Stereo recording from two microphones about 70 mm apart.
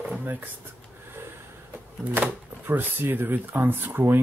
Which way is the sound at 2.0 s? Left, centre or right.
Right.